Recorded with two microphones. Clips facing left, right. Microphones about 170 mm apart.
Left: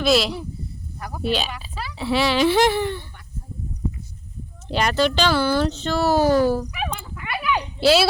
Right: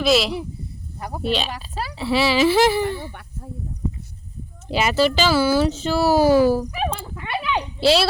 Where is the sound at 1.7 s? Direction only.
40° right (ahead or behind).